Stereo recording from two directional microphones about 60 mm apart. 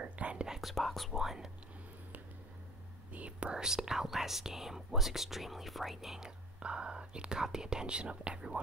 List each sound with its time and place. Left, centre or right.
0.0 s whispering: right
0.5 s whispering: centre
3.1 s speech: right